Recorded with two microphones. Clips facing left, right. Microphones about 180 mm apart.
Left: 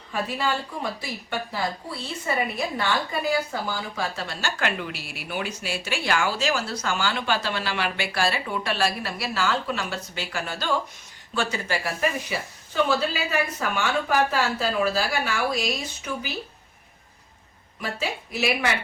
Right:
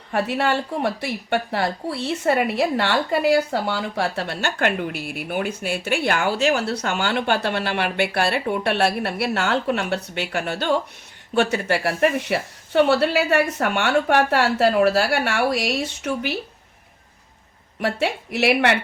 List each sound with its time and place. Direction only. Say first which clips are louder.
0.1 s a woman's voice: right 6 dB; 65° right (ahead or behind)
17.7 s a woman's voice: right 7 dB; 70° right (ahead or behind)